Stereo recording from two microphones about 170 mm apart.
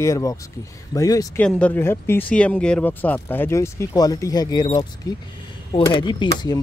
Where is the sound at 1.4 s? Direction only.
5° left (ahead or behind).